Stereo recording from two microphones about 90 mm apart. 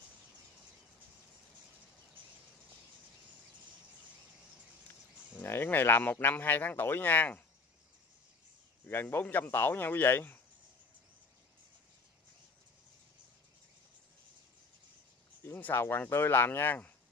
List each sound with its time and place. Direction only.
5.3 s speech: 25° left (ahead or behind)
8.8 s speech: 20° left (ahead or behind)
15.4 s speech: 25° left (ahead or behind)